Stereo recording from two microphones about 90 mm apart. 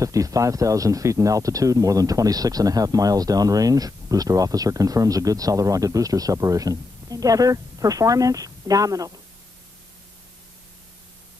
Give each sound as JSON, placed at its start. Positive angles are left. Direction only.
{"t": 0.0, "sound": "speech", "side_deg": -40}